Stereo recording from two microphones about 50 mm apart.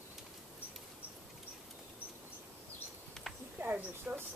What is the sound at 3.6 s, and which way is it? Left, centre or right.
Speech, right.